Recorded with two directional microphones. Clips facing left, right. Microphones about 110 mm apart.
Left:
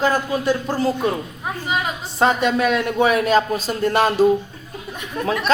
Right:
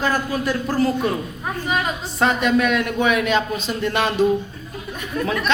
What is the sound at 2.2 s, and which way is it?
A man's voice, 30° left (ahead or behind).